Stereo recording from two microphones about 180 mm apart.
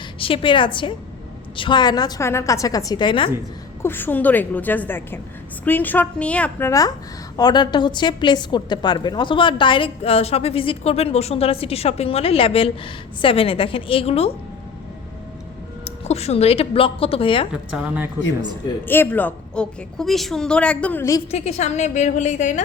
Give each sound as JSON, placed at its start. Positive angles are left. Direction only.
{"t": 0.2, "sound": "a woman's voice", "side_deg": 30}
{"t": 3.8, "sound": "a woman's voice", "side_deg": 10}
{"t": 15.8, "sound": "a woman's voice", "side_deg": 35}
{"t": 17.5, "sound": "a woman's voice", "side_deg": -5}
{"t": 18.9, "sound": "a woman's voice", "side_deg": 10}
{"t": 21.2, "sound": "a woman's voice", "side_deg": 35}